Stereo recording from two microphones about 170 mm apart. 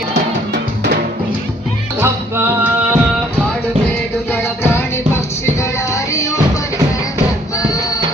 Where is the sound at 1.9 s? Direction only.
15° right (ahead or behind).